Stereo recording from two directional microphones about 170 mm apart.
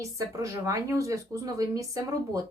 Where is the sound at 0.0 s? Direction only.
20° right (ahead or behind).